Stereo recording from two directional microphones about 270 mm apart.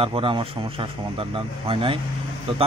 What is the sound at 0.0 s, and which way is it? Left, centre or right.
A man's voice, centre.